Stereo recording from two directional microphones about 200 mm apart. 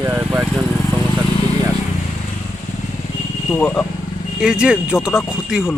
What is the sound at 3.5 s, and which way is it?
Speech, 5° left (ahead or behind).